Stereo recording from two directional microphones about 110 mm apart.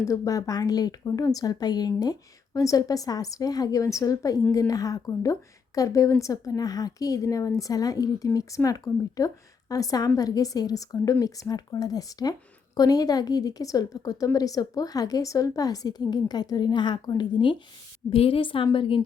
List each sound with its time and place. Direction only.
0.0 s a woman's voice: 30° left (ahead or behind); by 17.6 s 45° left (ahead or behind)
18.1 s a woman's voice: 60° left (ahead or behind)